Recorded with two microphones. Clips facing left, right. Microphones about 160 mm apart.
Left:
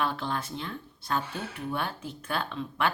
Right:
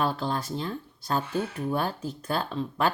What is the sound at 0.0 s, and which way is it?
Speech, 35° right (ahead or behind).